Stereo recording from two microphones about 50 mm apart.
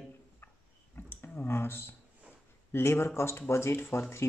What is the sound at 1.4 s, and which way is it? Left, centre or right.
Speech, left.